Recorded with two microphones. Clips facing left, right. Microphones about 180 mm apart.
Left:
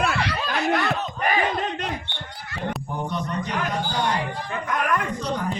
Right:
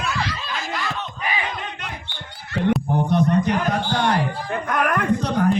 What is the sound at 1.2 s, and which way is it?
Battle cry, 45° left (ahead or behind).